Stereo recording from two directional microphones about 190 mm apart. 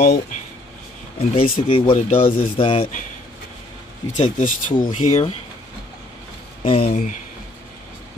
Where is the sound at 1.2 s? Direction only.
30° left (ahead or behind).